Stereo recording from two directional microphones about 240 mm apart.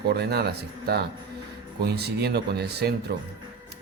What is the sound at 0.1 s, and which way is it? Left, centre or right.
Speech, right.